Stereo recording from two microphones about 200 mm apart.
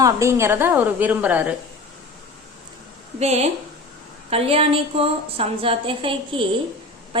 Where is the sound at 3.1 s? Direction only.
35° right (ahead or behind).